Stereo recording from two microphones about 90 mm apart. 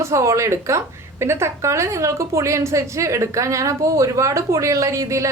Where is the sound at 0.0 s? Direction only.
35° right (ahead or behind).